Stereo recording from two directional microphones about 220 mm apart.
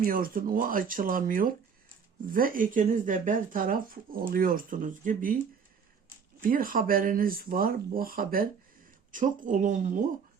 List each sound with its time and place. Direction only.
0.0 s speech: 40° right (ahead or behind)
6.4 s speech: 40° right (ahead or behind)